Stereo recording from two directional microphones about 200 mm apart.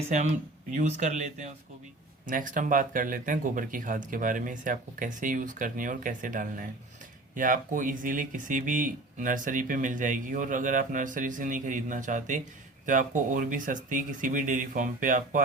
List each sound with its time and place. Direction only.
0.1 s speech: 35° right (ahead or behind)